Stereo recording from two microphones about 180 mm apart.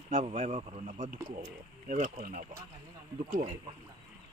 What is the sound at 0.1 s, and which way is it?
Speech, 40° right (ahead or behind).